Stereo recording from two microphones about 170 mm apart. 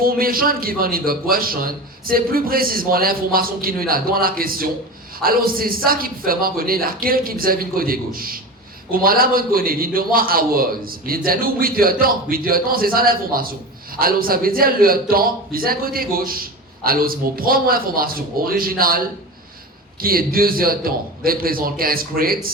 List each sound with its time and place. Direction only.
0.0 s a man's voice: 60° right (ahead or behind)